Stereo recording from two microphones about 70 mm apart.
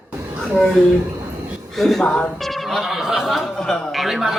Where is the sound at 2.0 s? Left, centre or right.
Centre.